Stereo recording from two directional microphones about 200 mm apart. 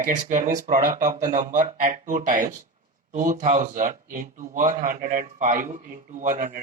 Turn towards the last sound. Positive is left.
turn(degrees=-40)  # may be behind; listen again after turning